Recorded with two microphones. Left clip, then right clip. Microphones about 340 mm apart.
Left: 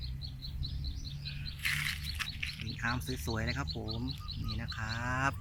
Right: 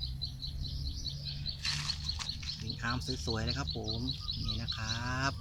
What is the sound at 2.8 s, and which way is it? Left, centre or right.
Cricket, centre.